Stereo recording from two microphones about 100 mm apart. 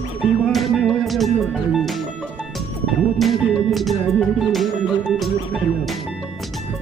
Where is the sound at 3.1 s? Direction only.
Centre (ahead or behind).